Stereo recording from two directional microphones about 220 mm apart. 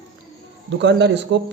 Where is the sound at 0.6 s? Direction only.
50° right (ahead or behind).